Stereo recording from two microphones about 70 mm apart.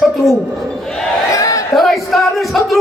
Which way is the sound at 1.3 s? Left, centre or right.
Left.